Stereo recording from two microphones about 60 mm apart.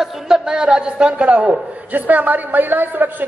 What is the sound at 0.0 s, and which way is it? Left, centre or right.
A man's voice, centre.